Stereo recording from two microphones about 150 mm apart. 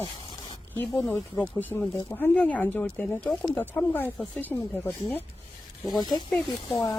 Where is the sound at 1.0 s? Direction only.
15° left (ahead or behind).